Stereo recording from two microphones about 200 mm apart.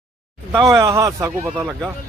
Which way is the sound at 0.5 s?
15° right (ahead or behind).